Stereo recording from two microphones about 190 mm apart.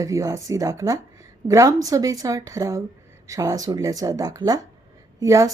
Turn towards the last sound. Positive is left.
turn(degrees=-15)  # may be behind; listen again after turning